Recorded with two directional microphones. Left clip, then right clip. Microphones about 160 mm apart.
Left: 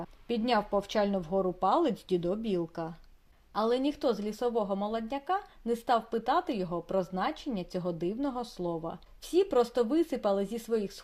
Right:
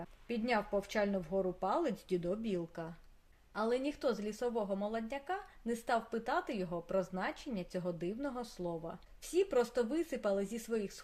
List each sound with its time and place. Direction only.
0.3 s a woman's voice: 25° left (ahead or behind)